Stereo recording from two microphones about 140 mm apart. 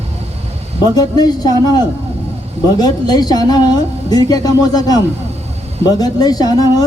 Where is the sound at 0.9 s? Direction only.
30° left (ahead or behind).